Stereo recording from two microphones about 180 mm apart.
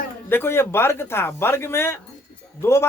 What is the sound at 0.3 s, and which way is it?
Speech, 10° left (ahead or behind).